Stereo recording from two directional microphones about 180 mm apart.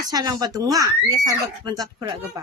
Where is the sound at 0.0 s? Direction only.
20° right (ahead or behind).